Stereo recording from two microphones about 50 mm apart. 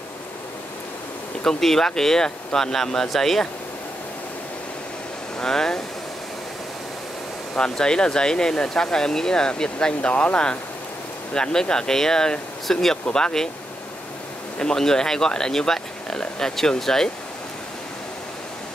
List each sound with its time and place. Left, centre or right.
1.4 s speech: centre
5.4 s speech: centre
7.5 s speech: centre
14.6 s speech: centre